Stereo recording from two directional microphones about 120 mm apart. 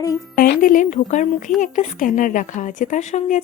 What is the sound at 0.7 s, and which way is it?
A woman's voice, 90° left.